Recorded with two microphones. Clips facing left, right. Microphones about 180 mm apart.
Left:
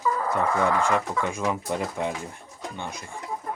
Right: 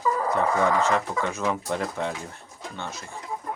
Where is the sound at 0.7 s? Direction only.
10° left (ahead or behind).